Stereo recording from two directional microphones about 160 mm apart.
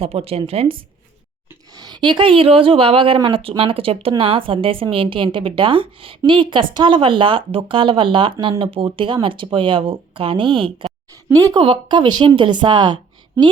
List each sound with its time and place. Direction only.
0.0 s a woman's voice: 35° right (ahead or behind)
1.7 s a woman's voice: 25° right (ahead or behind)